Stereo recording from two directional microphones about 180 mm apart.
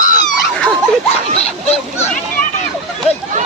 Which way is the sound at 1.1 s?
35° left (ahead or behind).